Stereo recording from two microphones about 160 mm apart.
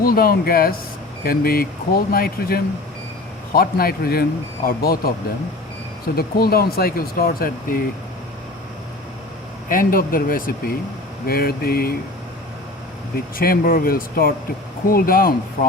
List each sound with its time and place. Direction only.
0.0 s speech: 65° left (ahead or behind)
6.1 s speech: 70° left (ahead or behind)
9.6 s speech: 60° left (ahead or behind)
13.1 s speech: 65° left (ahead or behind)